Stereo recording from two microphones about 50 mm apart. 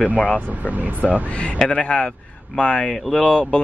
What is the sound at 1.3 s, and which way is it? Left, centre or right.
Speech, left.